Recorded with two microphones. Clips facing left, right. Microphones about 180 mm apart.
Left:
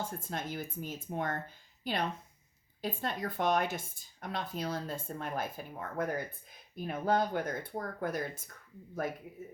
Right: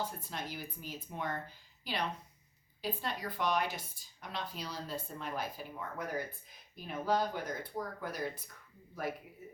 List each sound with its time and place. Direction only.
0.0 s a woman's voice: 50° left (ahead or behind)